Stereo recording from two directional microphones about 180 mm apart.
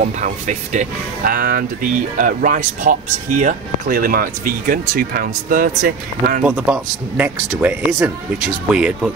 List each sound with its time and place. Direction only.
0.0 s speech: 45° right (ahead or behind)
6.4 s speech: 5° right (ahead or behind)